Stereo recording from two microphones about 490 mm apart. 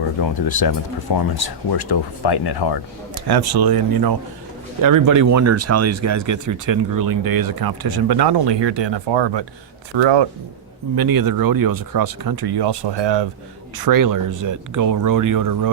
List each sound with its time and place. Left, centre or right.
0.2 s speech: left
3.2 s speech: right
10.9 s speech: right
13.7 s speech: right